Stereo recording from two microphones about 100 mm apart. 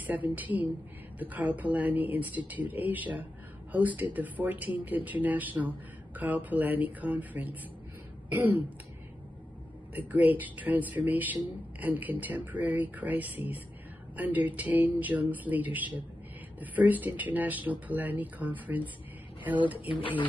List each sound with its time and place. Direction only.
0.0 s speech: 15° right (ahead or behind)
8.3 s throat clearing: 15° right (ahead or behind)
9.9 s speech: 20° right (ahead or behind)